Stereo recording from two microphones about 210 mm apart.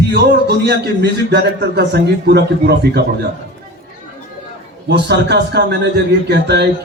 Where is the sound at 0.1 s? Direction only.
55° right (ahead or behind).